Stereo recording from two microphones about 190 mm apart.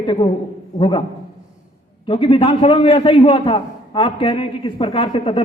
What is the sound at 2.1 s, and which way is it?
A man's voice, 30° left (ahead or behind).